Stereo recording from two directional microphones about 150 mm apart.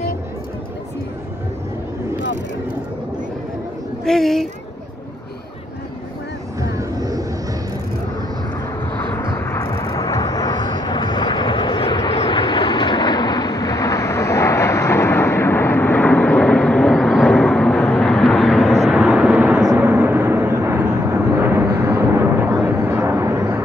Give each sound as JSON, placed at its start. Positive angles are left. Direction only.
{"t": 4.0, "sound": "speech", "side_deg": 5}
{"t": 6.6, "sound": "vehicle", "side_deg": -25}
{"t": 8.9, "sound": "vehicle", "side_deg": 15}
{"t": 21.8, "sound": "a sound", "side_deg": -15}